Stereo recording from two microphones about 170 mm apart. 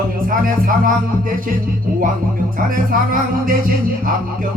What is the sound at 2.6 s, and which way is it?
Music, 55° right (ahead or behind).